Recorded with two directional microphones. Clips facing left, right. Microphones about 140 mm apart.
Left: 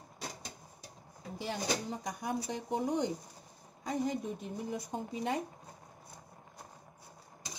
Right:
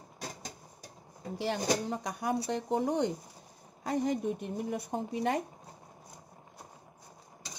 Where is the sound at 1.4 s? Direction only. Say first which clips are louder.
Right 5 dB; 75° right (ahead or behind).